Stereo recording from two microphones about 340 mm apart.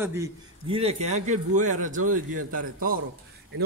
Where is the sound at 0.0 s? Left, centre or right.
Centre.